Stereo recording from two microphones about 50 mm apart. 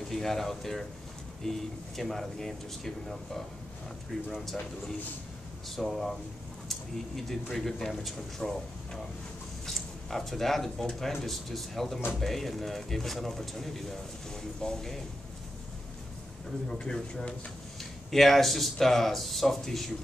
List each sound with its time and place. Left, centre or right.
0.1 s speech: centre
16.6 s speech: centre
18.1 s speech: centre